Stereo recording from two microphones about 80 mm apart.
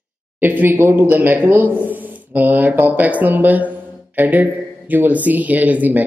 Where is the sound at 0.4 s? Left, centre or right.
Right.